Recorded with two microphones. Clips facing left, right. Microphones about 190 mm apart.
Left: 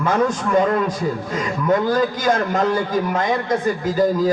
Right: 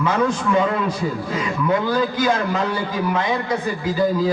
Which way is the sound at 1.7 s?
45° left (ahead or behind).